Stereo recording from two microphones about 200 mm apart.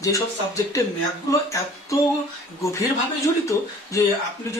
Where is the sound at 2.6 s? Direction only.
15° left (ahead or behind).